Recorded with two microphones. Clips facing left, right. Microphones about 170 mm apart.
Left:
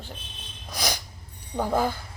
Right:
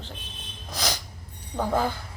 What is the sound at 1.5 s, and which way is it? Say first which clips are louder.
Speech: left 1 dB; 10° left (ahead or behind).